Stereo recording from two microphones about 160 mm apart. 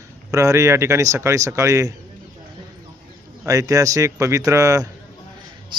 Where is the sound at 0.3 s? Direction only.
20° right (ahead or behind).